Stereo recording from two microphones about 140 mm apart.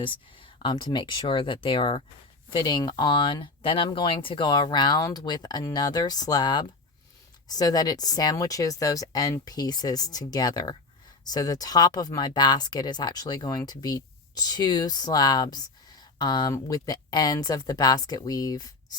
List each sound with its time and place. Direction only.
0.0 s speech: 35° left (ahead or behind)